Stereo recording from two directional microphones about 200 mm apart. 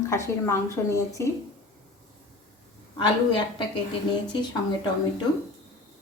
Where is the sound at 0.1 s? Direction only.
15° left (ahead or behind).